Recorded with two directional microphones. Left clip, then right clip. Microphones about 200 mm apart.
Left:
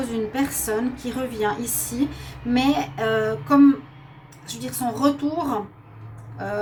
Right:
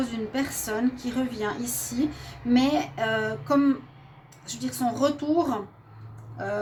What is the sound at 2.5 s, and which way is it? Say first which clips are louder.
A woman's voice: left 3 dB; 40° right (ahead or behind).